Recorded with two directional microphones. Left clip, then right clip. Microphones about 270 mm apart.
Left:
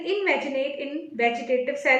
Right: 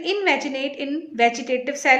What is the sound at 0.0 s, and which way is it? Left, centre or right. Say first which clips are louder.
A woman's voice: right 3 dB; right.